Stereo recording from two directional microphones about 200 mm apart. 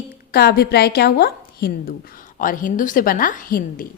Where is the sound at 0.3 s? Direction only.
50° left (ahead or behind).